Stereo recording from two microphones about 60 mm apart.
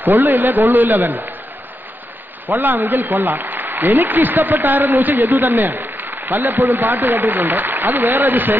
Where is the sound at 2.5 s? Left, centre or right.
Right.